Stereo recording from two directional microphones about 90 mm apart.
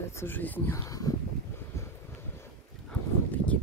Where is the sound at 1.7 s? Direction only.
30° left (ahead or behind).